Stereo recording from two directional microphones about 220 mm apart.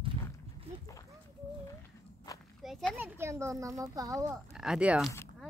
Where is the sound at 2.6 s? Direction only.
Centre (ahead or behind).